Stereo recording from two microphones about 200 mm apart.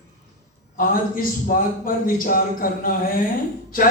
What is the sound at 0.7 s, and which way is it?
A man's voice, 45° left (ahead or behind).